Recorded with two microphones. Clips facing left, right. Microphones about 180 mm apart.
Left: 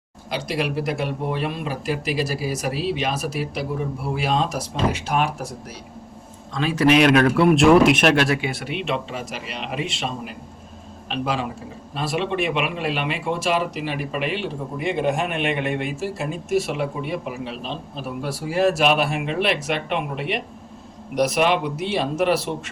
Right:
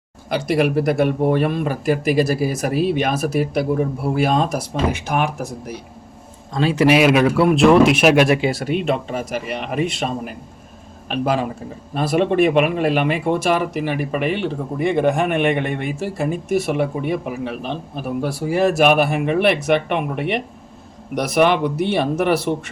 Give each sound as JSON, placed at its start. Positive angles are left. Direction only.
{"t": 0.3, "sound": "speech", "side_deg": -55}
{"t": 6.5, "sound": "a man's voice", "side_deg": -35}
{"t": 6.7, "sound": "a man's voice", "side_deg": -10}
{"t": 8.4, "sound": "speech", "side_deg": -35}